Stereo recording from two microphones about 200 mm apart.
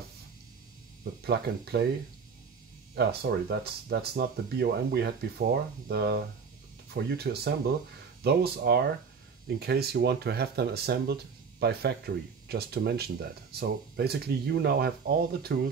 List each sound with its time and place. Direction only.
1.2 s speech: 55° right (ahead or behind)
2.9 s speech: 50° right (ahead or behind)